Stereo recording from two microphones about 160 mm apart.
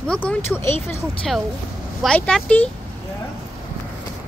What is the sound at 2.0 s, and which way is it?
Speech, 5° left (ahead or behind).